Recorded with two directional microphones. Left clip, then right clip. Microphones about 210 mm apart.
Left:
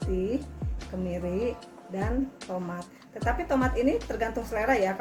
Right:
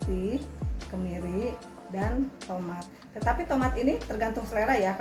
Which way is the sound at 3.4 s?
40° left (ahead or behind).